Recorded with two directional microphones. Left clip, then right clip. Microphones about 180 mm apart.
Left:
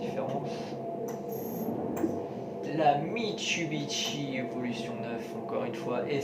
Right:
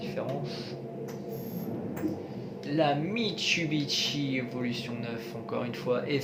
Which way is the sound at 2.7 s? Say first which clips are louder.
Left 1 dB; 60° right (ahead or behind).